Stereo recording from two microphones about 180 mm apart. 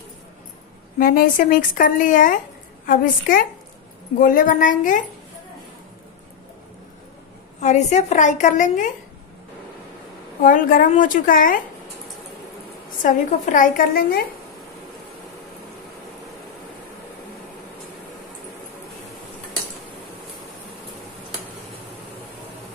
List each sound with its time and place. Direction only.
0.9 s speech: 50° left (ahead or behind)
7.6 s speech: 40° left (ahead or behind)
10.4 s speech: 50° left (ahead or behind)
13.0 s speech: 45° left (ahead or behind)